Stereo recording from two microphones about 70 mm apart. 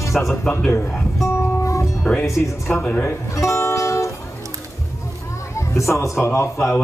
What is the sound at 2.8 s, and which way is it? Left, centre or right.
Speech, left.